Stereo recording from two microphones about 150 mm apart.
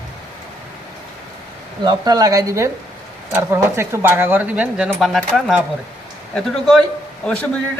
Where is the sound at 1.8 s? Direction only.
30° right (ahead or behind).